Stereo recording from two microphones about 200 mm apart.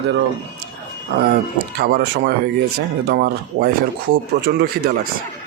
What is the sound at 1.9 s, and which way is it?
Speech, 50° right (ahead or behind).